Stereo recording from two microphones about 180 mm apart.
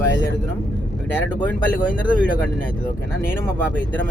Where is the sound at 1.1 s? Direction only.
10° left (ahead or behind).